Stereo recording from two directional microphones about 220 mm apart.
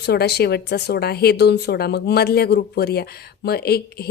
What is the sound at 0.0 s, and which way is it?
Speech, 45° left (ahead or behind).